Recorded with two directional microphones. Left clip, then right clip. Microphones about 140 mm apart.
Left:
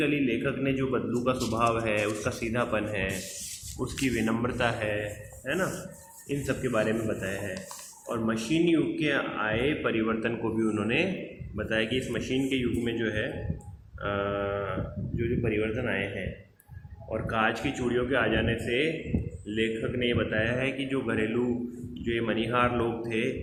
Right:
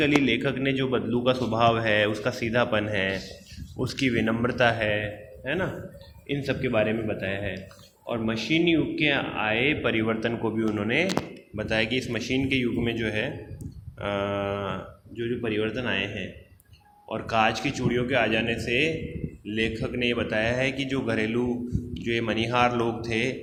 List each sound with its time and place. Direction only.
0.0 s a man's voice: 35° right (ahead or behind)
6.2 s a man's voice: 35° right (ahead or behind)
17.1 s a man's voice: 35° right (ahead or behind)